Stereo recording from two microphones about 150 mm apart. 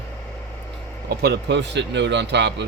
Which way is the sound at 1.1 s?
90° right.